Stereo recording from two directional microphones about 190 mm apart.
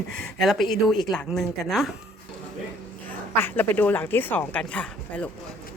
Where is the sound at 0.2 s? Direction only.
Centre (ahead or behind).